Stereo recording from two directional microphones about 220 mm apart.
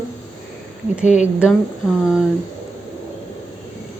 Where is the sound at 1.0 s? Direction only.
35° left (ahead or behind).